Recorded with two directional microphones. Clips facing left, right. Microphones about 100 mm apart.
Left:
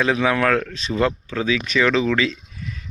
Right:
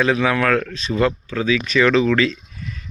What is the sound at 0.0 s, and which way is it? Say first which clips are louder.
Speech: right 1 dB; 20° left (ahead or behind).